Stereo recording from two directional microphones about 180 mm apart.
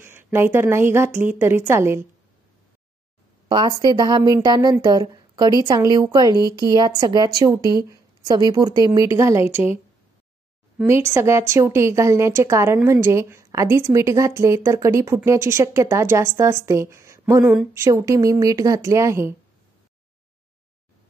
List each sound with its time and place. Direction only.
0.0 s a woman's voice: 15° right (ahead or behind)
3.4 s a woman's voice: 25° right (ahead or behind)
10.9 s a woman's voice: 15° right (ahead or behind)